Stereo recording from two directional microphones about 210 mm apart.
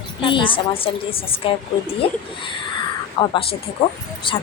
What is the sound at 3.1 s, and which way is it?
A woman's voice, 25° left (ahead or behind).